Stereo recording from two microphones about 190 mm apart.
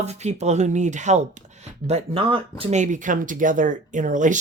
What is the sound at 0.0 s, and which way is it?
Speech, 35° right (ahead or behind).